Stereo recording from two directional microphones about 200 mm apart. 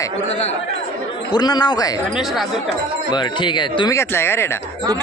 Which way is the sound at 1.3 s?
20° left (ahead or behind).